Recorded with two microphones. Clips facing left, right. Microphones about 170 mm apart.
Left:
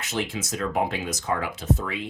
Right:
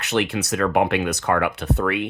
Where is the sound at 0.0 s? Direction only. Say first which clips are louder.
Right 7 dB; 70° right (ahead or behind).